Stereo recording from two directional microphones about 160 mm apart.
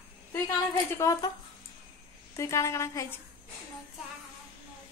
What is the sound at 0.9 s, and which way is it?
Speech, 20° left (ahead or behind).